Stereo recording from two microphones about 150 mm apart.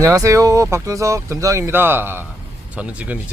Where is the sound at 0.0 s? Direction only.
20° right (ahead or behind).